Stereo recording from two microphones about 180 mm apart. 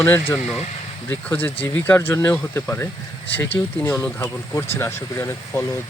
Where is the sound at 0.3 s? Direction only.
5° right (ahead or behind).